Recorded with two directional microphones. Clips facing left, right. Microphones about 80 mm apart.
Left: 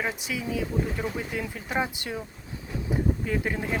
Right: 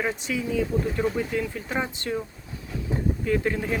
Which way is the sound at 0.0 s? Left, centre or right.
Centre.